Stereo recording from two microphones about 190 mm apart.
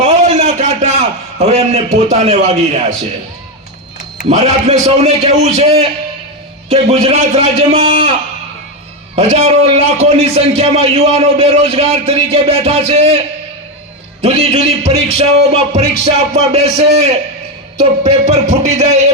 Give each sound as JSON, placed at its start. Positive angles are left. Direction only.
{"t": 0.0, "sound": "a man's voice", "side_deg": -35}
{"t": 4.3, "sound": "a man's voice", "side_deg": -35}
{"t": 9.1, "sound": "a man's voice", "side_deg": -35}